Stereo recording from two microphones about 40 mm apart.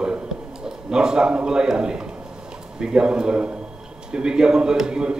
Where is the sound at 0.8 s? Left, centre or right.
Centre.